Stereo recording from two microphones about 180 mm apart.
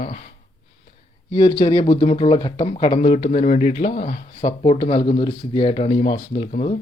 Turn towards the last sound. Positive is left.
turn(degrees=40)  # may be behind; listen again after turning